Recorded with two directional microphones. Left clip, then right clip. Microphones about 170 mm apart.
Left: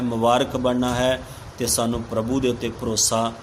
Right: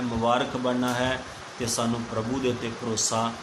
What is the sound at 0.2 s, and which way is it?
Speech, 60° left (ahead or behind).